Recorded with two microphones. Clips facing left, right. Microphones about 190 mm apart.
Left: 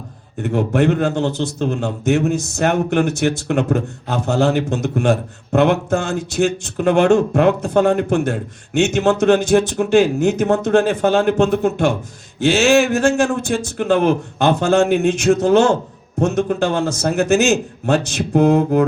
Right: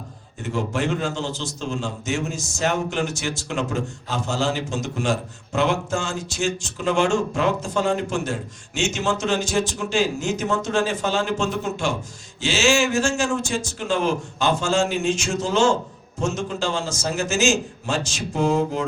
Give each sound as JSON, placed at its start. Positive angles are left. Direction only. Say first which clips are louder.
{"t": 0.4, "sound": "a man's voice", "louder": "left 8 dB", "side_deg": 60}